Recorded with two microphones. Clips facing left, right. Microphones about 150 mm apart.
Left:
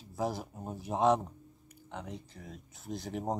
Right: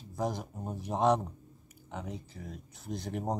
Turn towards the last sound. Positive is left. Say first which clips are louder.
# right 1 dB
turn(degrees=0)  # may be behind; listen again after turning